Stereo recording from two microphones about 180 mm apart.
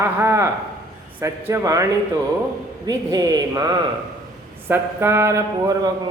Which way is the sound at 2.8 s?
20° right (ahead or behind).